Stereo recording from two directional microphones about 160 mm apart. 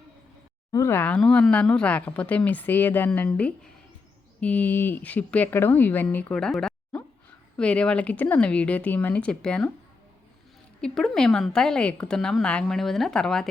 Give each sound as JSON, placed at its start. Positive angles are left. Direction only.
{"t": 0.7, "sound": "speech", "side_deg": 15}
{"t": 10.8, "sound": "a woman's voice", "side_deg": 5}